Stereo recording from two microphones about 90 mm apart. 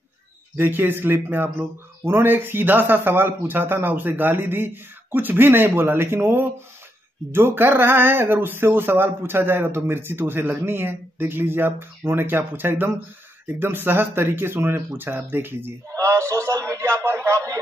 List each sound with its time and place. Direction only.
0.6 s a man's voice: 20° right (ahead or behind)